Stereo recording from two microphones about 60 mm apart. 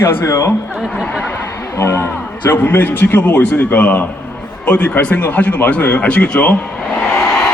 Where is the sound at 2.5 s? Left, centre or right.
Left.